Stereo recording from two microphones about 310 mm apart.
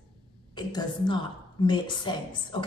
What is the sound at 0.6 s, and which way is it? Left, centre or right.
A woman's voice, centre.